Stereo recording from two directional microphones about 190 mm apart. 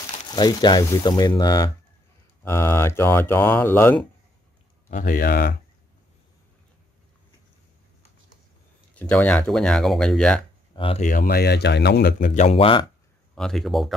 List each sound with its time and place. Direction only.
0.3 s speech: 20° left (ahead or behind)
4.8 s speech: 45° left (ahead or behind)
8.9 s speech: 10° left (ahead or behind)
10.8 s speech: 30° left (ahead or behind)
11.1 s speech: 50° left (ahead or behind); by 12.8 s 30° left (ahead or behind)
13.3 s speech: 5° left (ahead or behind)